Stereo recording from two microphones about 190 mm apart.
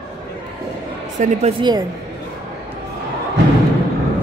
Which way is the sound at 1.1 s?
40° right (ahead or behind).